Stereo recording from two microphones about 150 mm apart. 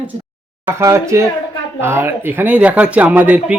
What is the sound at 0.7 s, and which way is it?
Speech, 15° right (ahead or behind).